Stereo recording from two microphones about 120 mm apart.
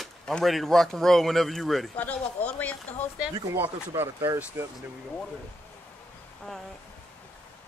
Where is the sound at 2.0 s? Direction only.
10° left (ahead or behind).